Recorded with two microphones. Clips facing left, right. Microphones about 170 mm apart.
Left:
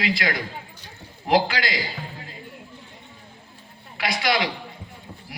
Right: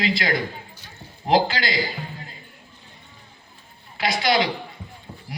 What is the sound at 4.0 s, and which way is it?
Speech, 25° right (ahead or behind).